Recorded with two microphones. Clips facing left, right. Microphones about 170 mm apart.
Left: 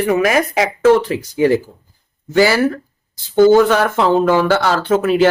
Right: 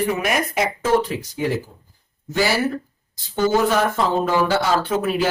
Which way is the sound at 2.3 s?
85° left.